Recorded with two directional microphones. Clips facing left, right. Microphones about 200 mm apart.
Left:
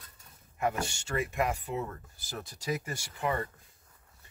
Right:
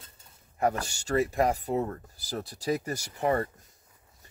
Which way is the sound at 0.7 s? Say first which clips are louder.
Right 4 dB; 40° right (ahead or behind).